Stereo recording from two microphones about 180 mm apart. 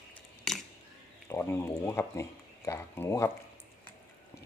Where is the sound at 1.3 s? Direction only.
15° left (ahead or behind).